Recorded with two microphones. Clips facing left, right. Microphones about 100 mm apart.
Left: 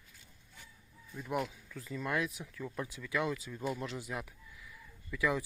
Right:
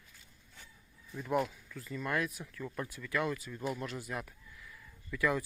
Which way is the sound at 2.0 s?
20° left (ahead or behind).